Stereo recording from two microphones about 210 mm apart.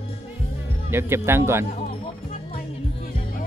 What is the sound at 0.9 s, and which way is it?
Speech, 10° right (ahead or behind).